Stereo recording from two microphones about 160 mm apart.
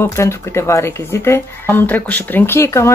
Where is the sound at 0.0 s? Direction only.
20° left (ahead or behind).